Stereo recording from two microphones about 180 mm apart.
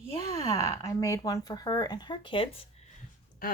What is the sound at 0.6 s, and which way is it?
Speech, 20° left (ahead or behind).